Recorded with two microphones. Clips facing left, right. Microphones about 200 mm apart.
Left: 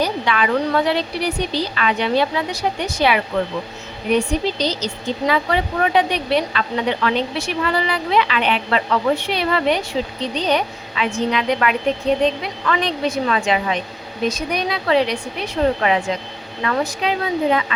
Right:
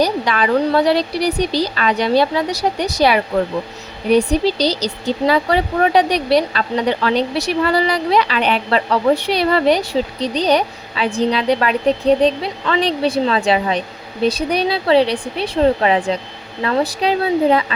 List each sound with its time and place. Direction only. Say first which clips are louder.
0.0 s speech: right 3 dB; 40° right (ahead or behind)